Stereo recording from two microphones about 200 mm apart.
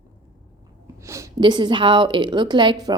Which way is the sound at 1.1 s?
15° right (ahead or behind).